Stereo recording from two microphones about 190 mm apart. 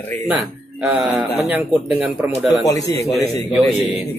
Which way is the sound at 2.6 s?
15° left (ahead or behind).